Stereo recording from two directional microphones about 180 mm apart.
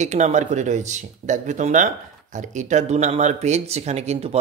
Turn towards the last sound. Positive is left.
turn(degrees=-35)  # may be behind; listen again after turning